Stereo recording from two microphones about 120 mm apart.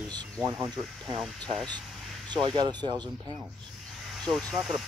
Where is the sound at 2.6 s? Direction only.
40° right (ahead or behind).